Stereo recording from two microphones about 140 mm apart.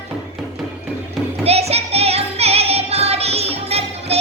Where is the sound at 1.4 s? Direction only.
45° right (ahead or behind).